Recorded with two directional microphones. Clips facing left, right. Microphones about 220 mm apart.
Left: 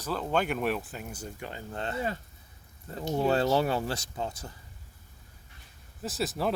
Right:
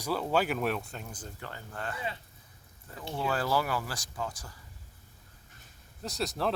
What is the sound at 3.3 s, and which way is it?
Speech, 25° left (ahead or behind).